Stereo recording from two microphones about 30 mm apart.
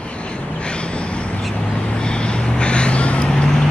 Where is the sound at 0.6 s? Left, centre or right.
Left.